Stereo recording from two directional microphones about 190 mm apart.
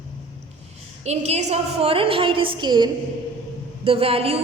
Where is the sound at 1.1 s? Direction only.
35° right (ahead or behind).